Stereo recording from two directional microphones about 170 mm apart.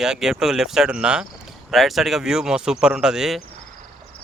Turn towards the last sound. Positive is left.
turn(degrees=-5)  # may be behind; listen again after turning